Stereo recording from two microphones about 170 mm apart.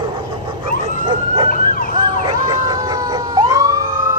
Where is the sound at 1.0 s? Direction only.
25° right (ahead or behind).